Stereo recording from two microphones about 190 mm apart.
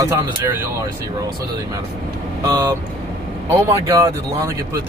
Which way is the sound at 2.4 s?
15° right (ahead or behind).